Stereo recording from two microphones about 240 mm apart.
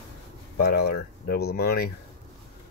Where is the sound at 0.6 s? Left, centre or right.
Left.